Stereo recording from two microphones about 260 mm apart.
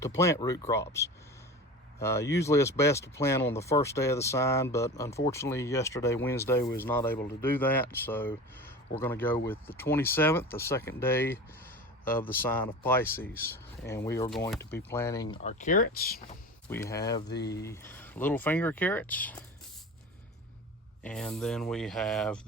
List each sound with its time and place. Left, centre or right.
0.2 s speech: centre
15.4 s speech: left
16.6 s speech: centre
17.2 s speech: left
17.6 s speech: centre
21.0 s speech: centre